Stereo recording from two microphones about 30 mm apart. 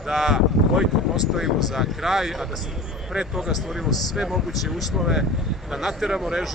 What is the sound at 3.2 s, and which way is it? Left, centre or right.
Speech, right.